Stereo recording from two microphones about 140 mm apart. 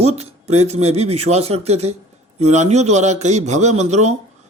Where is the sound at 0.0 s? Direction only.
50° right (ahead or behind).